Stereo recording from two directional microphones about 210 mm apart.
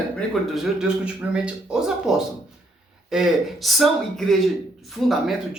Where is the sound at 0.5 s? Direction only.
Centre (ahead or behind).